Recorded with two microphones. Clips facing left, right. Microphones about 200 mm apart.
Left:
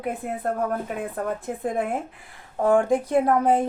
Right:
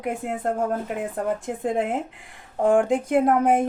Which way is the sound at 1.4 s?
15° right (ahead or behind).